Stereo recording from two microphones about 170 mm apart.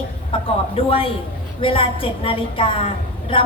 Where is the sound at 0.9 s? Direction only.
35° left (ahead or behind).